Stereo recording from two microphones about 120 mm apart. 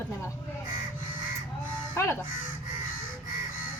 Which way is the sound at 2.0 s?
20° left (ahead or behind).